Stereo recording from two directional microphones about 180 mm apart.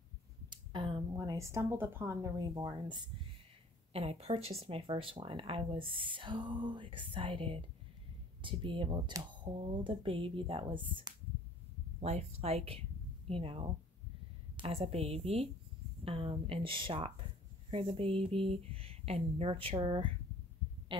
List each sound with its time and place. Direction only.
0.5 s a sound: 25° right (ahead or behind)
1.1 s speech: 15° right (ahead or behind)
3.9 s speech: 35° right (ahead or behind)